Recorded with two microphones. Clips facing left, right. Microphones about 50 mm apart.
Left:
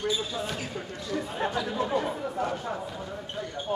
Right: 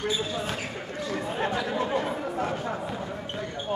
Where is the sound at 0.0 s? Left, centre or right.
Right.